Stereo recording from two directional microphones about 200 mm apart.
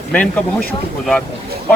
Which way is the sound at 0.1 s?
5° left (ahead or behind).